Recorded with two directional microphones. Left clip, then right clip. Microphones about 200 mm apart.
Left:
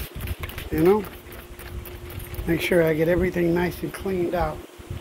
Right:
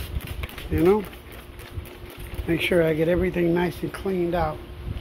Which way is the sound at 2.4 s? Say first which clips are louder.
Left 1 dB; centre (ahead or behind).